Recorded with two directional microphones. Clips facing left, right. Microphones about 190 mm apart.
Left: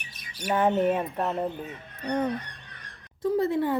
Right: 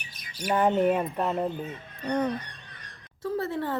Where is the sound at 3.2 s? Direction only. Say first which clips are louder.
Left 5 dB; 15° left (ahead or behind).